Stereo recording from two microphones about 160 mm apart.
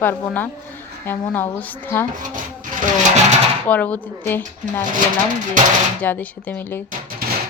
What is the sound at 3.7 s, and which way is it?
A woman's voice, 10° left (ahead or behind).